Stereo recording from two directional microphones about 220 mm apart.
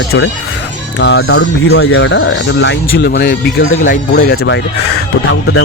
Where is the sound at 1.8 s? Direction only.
70° left (ahead or behind).